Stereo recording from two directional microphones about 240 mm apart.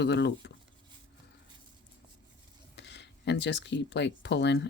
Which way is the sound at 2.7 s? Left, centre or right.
Left.